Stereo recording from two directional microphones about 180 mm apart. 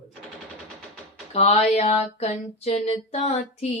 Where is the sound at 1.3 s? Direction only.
35° left (ahead or behind).